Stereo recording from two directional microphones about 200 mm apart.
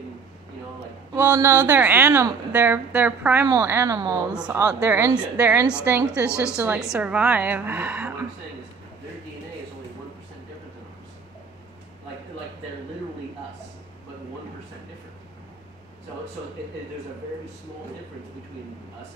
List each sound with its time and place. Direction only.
1.1 s a woman's voice: 15° right (ahead or behind)
4.3 s a woman's voice: 5° right (ahead or behind)